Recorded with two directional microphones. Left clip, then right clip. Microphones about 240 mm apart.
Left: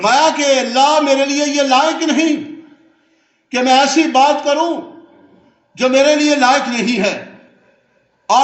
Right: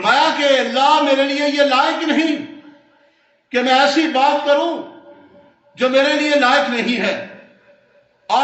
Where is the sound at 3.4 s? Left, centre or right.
Left.